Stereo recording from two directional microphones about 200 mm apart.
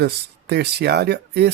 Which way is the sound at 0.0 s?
55° right (ahead or behind).